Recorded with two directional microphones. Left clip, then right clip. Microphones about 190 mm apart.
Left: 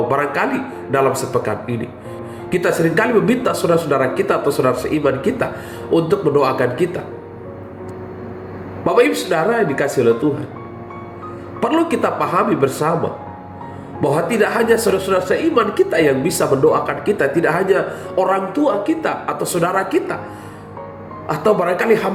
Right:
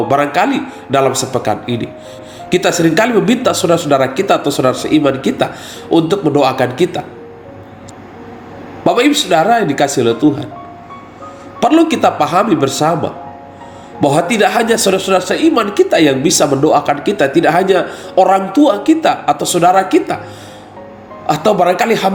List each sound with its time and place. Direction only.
0.1 s a man's voice: 40° right (ahead or behind)
8.8 s a woman's voice: 45° right (ahead or behind)
11.7 s a woman's voice: 40° right (ahead or behind)
14.0 s a woman's voice: 40° right (ahead or behind)
21.2 s a woman's voice: 40° right (ahead or behind)